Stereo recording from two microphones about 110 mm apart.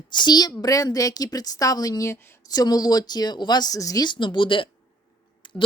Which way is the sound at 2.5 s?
35° left (ahead or behind).